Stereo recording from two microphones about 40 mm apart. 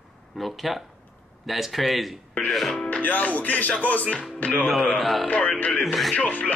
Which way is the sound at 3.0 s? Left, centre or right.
Left.